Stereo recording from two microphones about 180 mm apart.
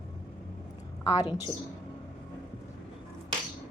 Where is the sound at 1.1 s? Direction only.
20° left (ahead or behind).